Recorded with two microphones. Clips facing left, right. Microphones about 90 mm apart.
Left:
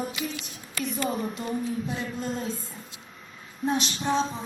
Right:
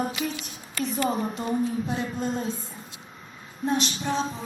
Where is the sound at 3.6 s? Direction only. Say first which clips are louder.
Right 1 dB; 15° left (ahead or behind).